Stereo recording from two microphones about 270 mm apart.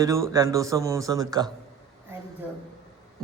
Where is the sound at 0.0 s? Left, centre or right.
Centre.